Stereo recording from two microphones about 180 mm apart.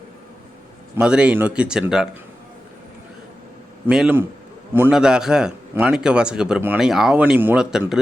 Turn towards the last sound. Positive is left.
turn(degrees=-5)  # may be behind; listen again after turning